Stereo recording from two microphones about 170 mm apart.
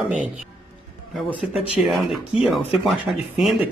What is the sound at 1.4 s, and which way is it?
Speech, 5° right (ahead or behind).